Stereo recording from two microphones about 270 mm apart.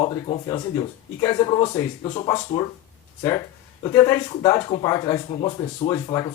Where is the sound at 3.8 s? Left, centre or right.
Centre.